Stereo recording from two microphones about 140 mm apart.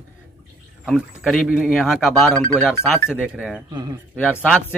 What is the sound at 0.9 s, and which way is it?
A man's voice, 5° right (ahead or behind).